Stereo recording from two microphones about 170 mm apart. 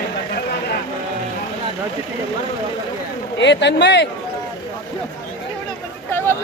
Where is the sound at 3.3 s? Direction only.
90° left.